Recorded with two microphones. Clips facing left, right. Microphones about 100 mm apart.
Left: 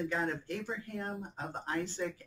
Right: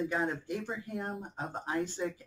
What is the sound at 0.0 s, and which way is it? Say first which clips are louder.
Speech: right 2 dB; 10° right (ahead or behind).